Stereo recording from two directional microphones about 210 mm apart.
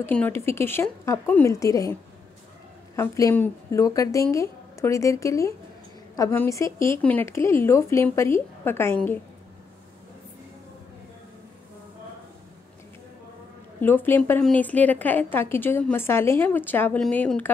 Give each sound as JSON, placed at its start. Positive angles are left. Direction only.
{"t": 0.0, "sound": "a woman's voice", "side_deg": 10}
{"t": 3.0, "sound": "a woman's voice", "side_deg": 15}
{"t": 13.7, "sound": "a woman's voice", "side_deg": 10}